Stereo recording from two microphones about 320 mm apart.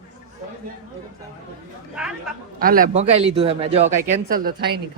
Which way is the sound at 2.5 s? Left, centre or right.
Right.